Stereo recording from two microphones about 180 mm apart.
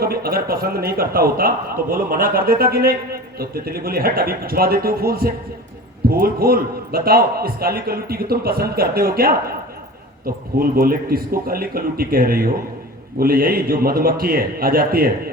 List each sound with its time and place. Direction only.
0.0 s a man's voice: 55° right (ahead or behind)